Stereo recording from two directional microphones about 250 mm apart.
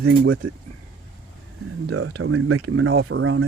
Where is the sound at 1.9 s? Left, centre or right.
Right.